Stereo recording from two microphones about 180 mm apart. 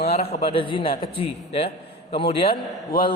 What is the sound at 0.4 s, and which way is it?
A man's voice, 30° left (ahead or behind).